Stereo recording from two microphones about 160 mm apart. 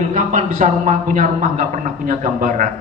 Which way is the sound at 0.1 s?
50° right (ahead or behind).